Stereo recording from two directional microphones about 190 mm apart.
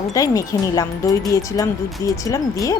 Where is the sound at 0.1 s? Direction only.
15° left (ahead or behind).